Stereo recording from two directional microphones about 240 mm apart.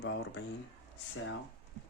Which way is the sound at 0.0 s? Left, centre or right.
Left.